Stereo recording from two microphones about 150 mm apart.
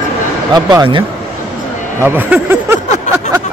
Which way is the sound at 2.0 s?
15° right (ahead or behind).